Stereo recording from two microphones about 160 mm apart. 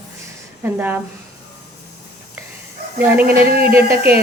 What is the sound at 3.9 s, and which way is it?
Speech, 70° right (ahead or behind).